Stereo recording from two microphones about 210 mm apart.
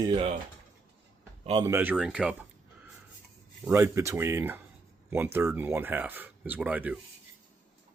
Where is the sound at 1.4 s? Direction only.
20° right (ahead or behind); by 2.3 s 5° right (ahead or behind).